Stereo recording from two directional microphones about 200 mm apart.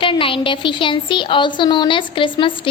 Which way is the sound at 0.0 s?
25° left (ahead or behind).